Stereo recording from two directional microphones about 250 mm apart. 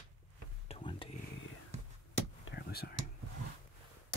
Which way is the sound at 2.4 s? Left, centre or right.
Left.